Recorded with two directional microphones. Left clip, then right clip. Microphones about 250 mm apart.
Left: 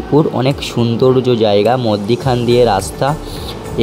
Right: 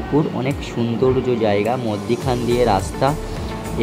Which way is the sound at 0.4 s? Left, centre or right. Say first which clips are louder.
Left 7 dB; centre.